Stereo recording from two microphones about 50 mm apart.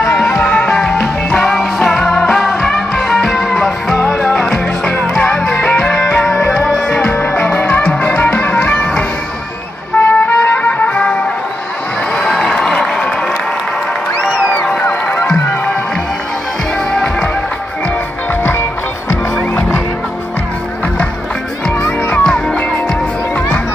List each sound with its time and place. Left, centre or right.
0.4 s music: left
1.6 s music: centre
5.4 s music: left
9.9 s trumpet: left
12.2 s crowd: centre
14.6 s music: left
16.9 s music: centre
22.1 s music: centre